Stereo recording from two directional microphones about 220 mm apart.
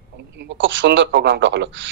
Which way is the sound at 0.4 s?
55° right (ahead or behind).